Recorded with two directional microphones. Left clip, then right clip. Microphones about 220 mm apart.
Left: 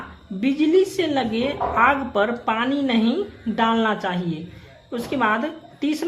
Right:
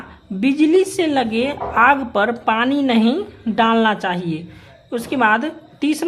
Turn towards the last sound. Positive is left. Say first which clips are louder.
# right 4 dB
turn(degrees=-35)  # may be behind; listen again after turning